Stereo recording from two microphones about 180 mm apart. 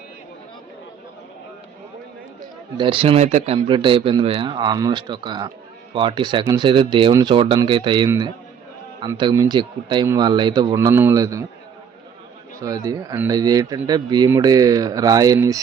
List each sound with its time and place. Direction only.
2.7 s speech: 30° right (ahead or behind)
12.6 s speech: 20° right (ahead or behind)